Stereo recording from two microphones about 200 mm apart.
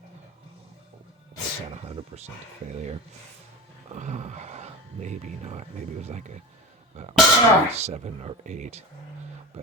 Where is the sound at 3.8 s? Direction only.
35° right (ahead or behind).